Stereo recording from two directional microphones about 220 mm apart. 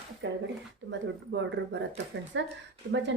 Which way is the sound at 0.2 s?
55° right (ahead or behind).